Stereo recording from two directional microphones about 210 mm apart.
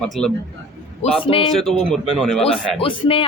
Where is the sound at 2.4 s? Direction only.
25° left (ahead or behind).